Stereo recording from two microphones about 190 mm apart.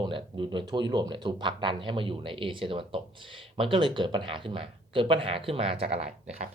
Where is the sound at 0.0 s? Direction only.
25° right (ahead or behind).